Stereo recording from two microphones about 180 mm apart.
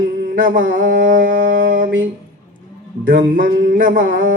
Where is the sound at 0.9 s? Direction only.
90° right.